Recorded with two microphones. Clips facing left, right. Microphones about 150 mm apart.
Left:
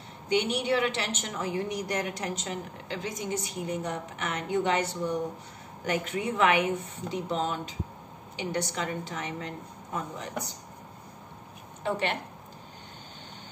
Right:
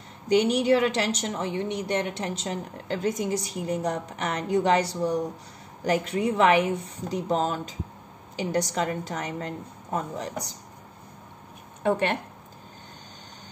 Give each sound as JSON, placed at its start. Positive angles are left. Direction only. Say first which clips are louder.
{"t": 0.3, "sound": "a woman's voice", "louder": "right 6 dB", "side_deg": -40}
{"t": 11.8, "sound": "speech", "louder": "right 5 dB", "side_deg": -45}